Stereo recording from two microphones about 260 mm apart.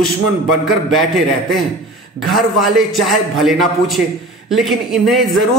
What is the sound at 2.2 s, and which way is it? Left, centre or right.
Speech, centre.